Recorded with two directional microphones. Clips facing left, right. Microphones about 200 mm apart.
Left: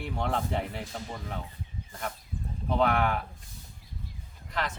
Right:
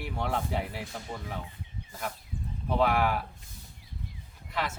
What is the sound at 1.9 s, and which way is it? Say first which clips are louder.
Speech: even; 5° right (ahead or behind).